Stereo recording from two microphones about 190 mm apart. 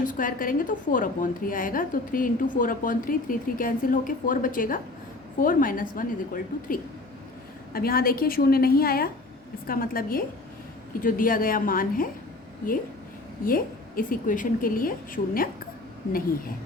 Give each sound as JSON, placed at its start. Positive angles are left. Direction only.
{"t": 0.0, "sound": "a woman's voice", "side_deg": 45}
{"t": 13.4, "sound": "a woman's voice", "side_deg": 50}